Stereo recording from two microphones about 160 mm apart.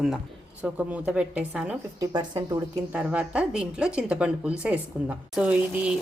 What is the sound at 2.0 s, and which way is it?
Speech, 25° right (ahead or behind).